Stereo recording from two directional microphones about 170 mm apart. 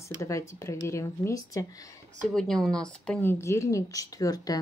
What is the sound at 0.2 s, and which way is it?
A woman's voice, 15° left (ahead or behind).